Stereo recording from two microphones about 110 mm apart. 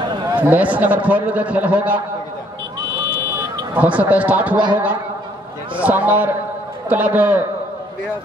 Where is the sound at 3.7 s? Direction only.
15° right (ahead or behind).